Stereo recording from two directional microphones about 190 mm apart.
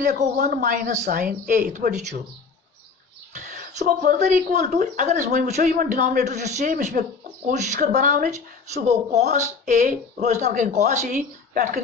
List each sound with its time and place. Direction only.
0.0 s speech: 45° right (ahead or behind)
3.3 s speech: 40° right (ahead or behind)